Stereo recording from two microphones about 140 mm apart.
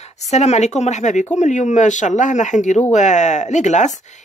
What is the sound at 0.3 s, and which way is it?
Speech, 55° left (ahead or behind).